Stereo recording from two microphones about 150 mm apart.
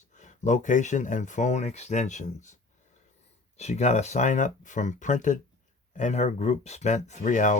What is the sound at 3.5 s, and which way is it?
Speech, 50° left (ahead or behind).